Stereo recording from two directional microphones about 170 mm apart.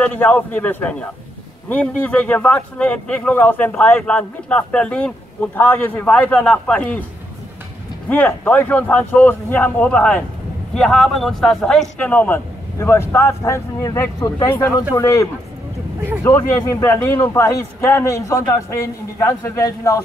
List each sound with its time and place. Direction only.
0.0 s speech: 10° left (ahead or behind)
8.1 s speech: 10° left (ahead or behind)
16.3 s speech: 15° left (ahead or behind)